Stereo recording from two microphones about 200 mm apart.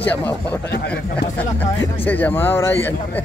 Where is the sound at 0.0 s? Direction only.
10° left (ahead or behind).